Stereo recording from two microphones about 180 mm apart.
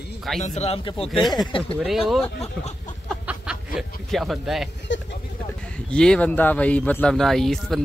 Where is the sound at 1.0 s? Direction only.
Centre (ahead or behind).